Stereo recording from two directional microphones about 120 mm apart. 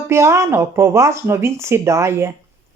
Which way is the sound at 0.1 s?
20° right (ahead or behind).